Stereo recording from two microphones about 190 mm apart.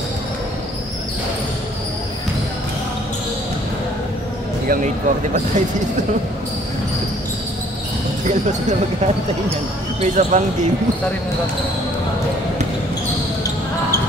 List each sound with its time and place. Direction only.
4.6 s speech: 40° right (ahead or behind)
8.3 s speech: 40° right (ahead or behind)